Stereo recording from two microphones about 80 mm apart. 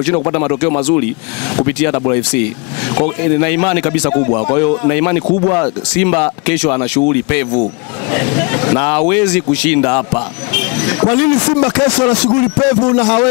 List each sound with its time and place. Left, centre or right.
0.3 s speech: centre